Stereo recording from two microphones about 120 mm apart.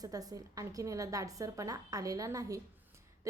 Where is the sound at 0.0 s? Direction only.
30° right (ahead or behind).